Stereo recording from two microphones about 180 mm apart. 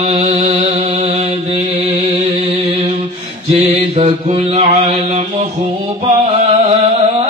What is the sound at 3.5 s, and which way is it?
Mantra, 35° right (ahead or behind).